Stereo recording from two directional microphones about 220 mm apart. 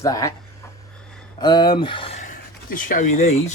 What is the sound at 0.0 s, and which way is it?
Speech, 15° left (ahead or behind).